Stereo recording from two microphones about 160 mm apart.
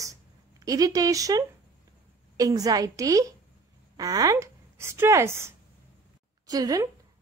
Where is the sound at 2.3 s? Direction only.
20° right (ahead or behind).